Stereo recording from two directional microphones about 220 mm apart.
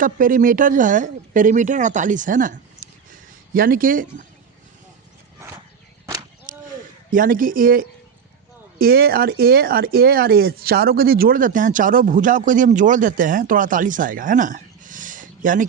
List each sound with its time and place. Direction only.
0.0 s speech: 40° right (ahead or behind)
6.5 s a sound: 35° right (ahead or behind)
7.1 s speech: 40° right (ahead or behind)